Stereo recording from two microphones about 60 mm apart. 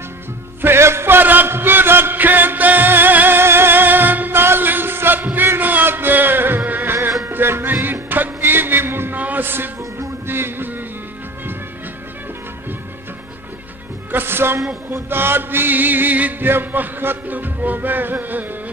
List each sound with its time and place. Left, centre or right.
0.6 s a sound: right
7.2 s music: right
14.1 s music: right
15.0 s chant: right